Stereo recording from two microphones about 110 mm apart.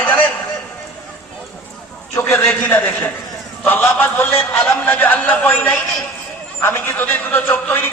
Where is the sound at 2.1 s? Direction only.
25° left (ahead or behind).